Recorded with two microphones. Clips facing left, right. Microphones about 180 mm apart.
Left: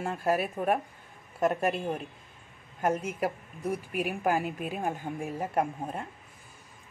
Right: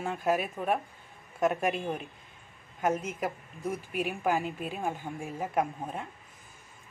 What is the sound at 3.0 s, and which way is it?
Speech, 10° left (ahead or behind).